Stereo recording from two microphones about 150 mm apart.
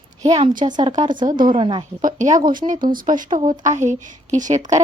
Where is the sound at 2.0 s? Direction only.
55° right (ahead or behind).